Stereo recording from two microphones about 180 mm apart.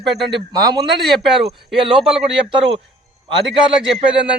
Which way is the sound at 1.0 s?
Centre (ahead or behind).